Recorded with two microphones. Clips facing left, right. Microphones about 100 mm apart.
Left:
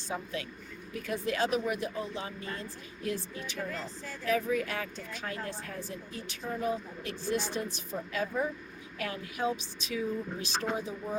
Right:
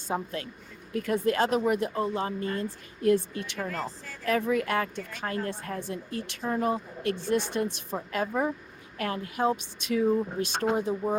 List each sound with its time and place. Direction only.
0.1 s speech: 45° right (ahead or behind)
3.1 s speech: 60° right (ahead or behind)
9.0 s speech: 45° right (ahead or behind)